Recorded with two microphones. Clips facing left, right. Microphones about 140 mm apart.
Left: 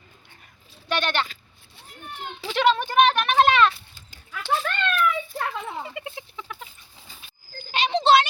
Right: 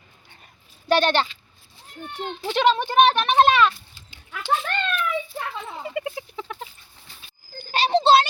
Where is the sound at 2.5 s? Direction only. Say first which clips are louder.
Right 1 dB; 20° right (ahead or behind).